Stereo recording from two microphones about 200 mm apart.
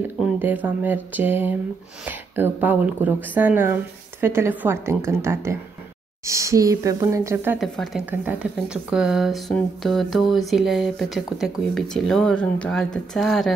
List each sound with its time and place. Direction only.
0.2 s speech: 10° right (ahead or behind)
7.6 s speech: centre (ahead or behind)